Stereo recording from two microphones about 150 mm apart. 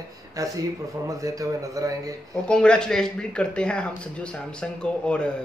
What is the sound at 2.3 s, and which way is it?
A man's voice, 5° left (ahead or behind).